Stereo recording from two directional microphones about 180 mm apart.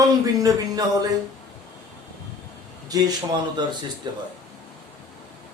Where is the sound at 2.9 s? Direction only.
20° right (ahead or behind).